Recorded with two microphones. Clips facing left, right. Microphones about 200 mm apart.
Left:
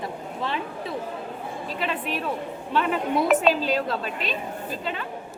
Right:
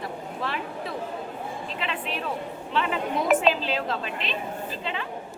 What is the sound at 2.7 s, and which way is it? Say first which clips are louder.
A woman's voice: left 3 dB; 45° left (ahead or behind).